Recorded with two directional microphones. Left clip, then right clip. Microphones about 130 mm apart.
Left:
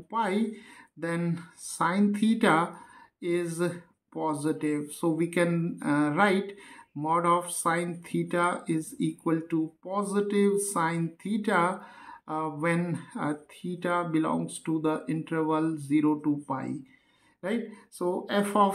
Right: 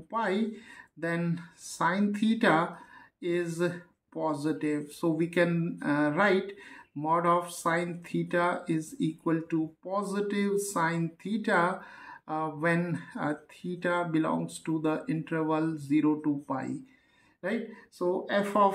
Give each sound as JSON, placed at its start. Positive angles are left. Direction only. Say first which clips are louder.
{"t": 0.1, "sound": "speech", "louder": "left 1 dB", "side_deg": 20}